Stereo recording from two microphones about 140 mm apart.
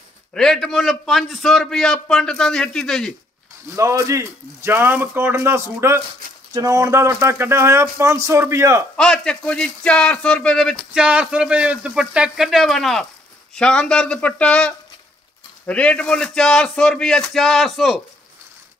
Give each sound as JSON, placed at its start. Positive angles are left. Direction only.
{"t": 0.3, "sound": "a man's voice", "side_deg": 5}
{"t": 3.7, "sound": "speech", "side_deg": -20}
{"t": 8.9, "sound": "a man's voice", "side_deg": 5}